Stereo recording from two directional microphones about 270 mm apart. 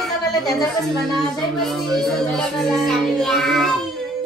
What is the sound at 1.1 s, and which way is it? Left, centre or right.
Speech, centre.